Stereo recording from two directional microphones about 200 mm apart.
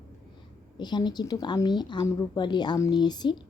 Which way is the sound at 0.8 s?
20° left (ahead or behind).